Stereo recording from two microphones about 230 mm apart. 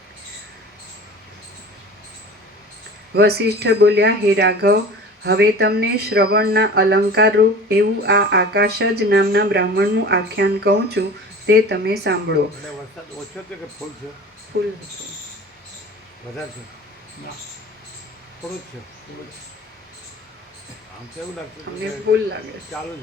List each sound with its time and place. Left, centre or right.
3.2 s speech: right
14.5 s speech: right
21.7 s speech: right
22.1 s speech: right